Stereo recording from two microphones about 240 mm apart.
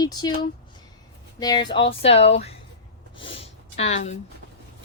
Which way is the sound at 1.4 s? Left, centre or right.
Centre.